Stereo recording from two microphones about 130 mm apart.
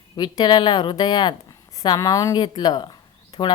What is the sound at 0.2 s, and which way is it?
A woman's voice, 35° left (ahead or behind).